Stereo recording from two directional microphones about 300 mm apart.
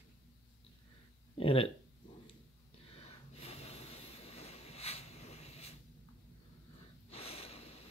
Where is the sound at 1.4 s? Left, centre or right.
Centre.